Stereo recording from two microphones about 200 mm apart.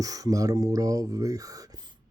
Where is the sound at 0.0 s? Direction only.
15° right (ahead or behind).